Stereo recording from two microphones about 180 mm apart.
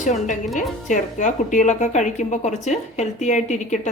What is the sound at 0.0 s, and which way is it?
A woman's voice, 45° left (ahead or behind).